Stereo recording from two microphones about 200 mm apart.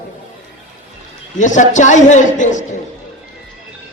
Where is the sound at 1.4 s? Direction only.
40° left (ahead or behind).